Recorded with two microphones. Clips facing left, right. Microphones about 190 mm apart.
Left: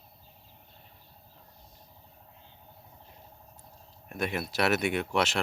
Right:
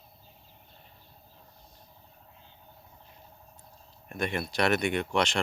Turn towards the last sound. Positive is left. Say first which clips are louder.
# right 1 dB
turn(degrees=5)  # may be behind; listen again after turning